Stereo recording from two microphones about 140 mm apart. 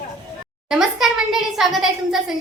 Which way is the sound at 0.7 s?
5° right (ahead or behind).